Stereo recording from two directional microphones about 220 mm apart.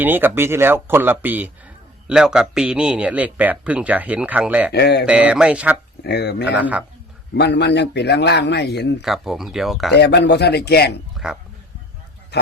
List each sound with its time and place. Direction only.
0.0 s speech: 10° right (ahead or behind)
4.7 s a man's voice: 50° left (ahead or behind)
5.0 s speech: 5° right (ahead or behind)
6.0 s a man's voice: 50° left (ahead or behind)
6.5 s speech: 5° right (ahead or behind)
7.3 s a man's voice: 50° left (ahead or behind)
9.0 s speech: centre (ahead or behind)
9.9 s a man's voice: 50° left (ahead or behind)
11.1 s a sound: 5° right (ahead or behind)
12.3 s pig: 50° left (ahead or behind)